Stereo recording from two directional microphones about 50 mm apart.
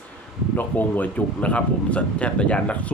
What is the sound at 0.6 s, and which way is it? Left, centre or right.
A man's voice, left.